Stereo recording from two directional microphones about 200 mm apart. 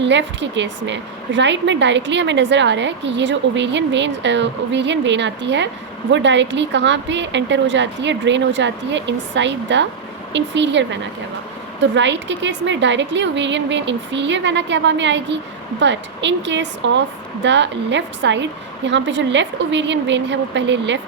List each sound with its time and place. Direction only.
0.0 s a woman's voice: 65° right (ahead or behind)